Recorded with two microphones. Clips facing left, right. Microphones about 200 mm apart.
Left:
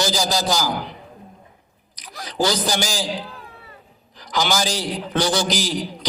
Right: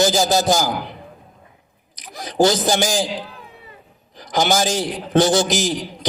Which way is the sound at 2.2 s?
50° right (ahead or behind).